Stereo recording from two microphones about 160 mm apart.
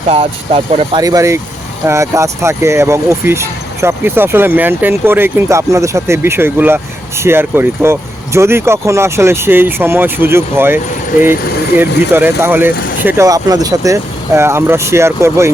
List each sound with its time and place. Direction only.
0.1 s speech: 40° right (ahead or behind)
0.9 s speech: 20° right (ahead or behind)
11.8 s speech: 15° right (ahead or behind)